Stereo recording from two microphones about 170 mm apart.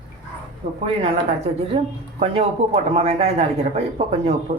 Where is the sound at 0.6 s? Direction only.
35° right (ahead or behind).